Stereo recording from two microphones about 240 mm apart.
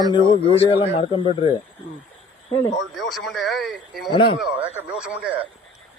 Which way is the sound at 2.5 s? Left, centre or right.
Centre.